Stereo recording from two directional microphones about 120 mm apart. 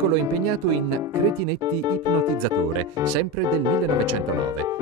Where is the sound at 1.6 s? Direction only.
35° right (ahead or behind).